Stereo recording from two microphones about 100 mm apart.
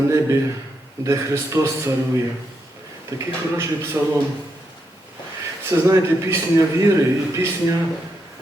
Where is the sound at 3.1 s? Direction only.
30° right (ahead or behind).